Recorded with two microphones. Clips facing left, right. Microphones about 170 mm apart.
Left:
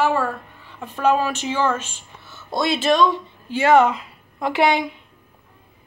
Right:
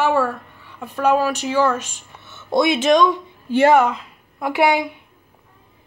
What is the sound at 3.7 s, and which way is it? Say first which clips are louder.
Speech: left 1 dB; 5° right (ahead or behind).